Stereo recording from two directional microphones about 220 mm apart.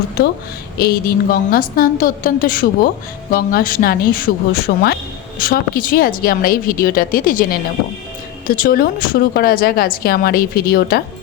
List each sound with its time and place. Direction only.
0.8 s a woman's voice: 45° left (ahead or behind)